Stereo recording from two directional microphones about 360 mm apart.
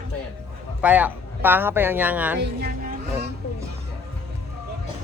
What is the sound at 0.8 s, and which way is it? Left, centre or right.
Speech, centre.